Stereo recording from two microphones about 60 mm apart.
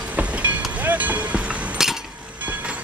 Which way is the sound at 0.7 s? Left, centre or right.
Right.